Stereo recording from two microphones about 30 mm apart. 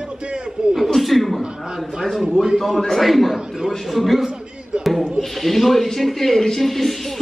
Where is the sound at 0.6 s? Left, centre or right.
Right.